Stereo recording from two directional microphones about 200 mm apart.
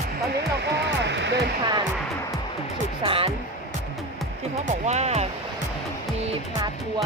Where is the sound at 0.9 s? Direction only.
65° right (ahead or behind).